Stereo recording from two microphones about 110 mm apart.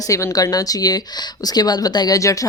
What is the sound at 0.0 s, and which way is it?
A woman's voice, 30° left (ahead or behind).